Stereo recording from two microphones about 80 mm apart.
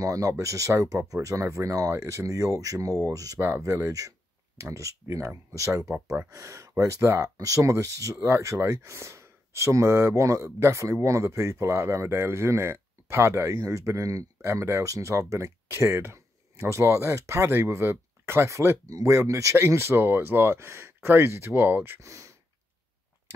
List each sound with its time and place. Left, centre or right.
0.0 s speech: right
3.3 s speech: right
22.0 s speech: right